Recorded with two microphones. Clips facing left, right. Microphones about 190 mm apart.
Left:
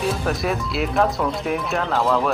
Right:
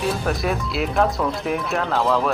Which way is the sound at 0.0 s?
Centre (ahead or behind).